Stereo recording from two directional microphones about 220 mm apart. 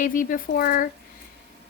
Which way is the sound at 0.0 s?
35° left (ahead or behind).